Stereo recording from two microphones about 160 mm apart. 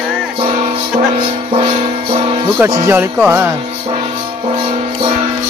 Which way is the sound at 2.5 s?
20° right (ahead or behind).